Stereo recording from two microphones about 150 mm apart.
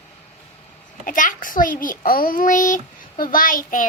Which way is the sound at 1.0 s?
60° left (ahead or behind).